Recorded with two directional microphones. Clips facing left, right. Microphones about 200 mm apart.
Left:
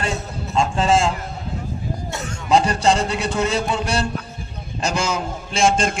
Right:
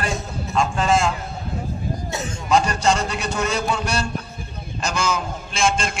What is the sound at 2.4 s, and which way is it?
A man's voice, 30° left (ahead or behind).